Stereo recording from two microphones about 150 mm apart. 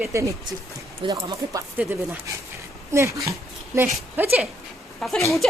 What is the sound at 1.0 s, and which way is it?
Speech, 35° right (ahead or behind).